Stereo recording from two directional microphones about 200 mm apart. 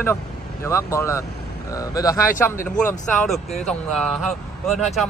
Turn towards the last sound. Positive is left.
turn(degrees=0)  # may be behind; listen again after turning